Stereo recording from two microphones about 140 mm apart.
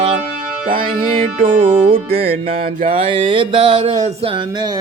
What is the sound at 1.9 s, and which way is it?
Music, 40° right (ahead or behind).